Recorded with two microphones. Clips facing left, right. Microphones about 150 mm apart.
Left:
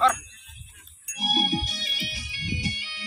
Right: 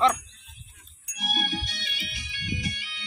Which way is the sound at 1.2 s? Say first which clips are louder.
Left 5 dB; 40° left (ahead or behind).